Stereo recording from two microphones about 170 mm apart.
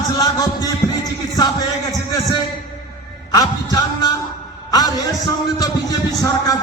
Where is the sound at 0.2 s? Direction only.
20° left (ahead or behind).